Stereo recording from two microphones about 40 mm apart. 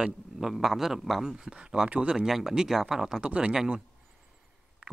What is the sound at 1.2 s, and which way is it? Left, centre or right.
Speech, centre.